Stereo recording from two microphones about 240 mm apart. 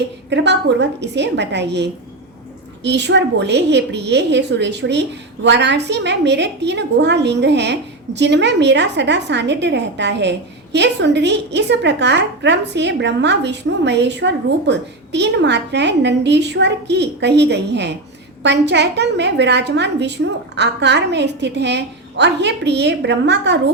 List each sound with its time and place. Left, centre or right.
0.3 s a woman's voice: right